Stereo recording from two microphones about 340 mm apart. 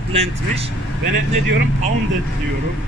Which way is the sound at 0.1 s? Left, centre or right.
Centre.